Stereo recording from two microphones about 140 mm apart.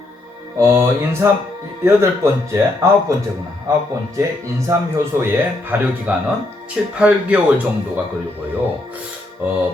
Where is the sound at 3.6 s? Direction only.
25° right (ahead or behind); by 7.4 s 10° right (ahead or behind).